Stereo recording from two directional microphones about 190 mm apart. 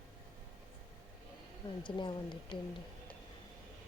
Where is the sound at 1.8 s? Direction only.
25° left (ahead or behind).